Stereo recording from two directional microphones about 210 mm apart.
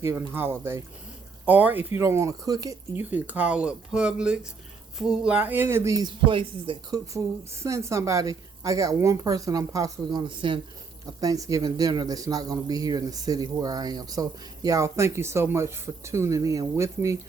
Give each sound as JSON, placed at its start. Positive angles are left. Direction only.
{"t": 0.0, "sound": "speech", "side_deg": -10}